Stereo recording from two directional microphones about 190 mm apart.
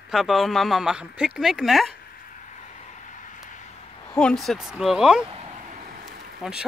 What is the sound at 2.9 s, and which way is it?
Vehicle, 40° left (ahead or behind).